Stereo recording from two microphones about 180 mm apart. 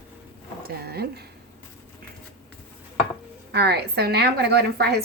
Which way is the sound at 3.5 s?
65° right (ahead or behind).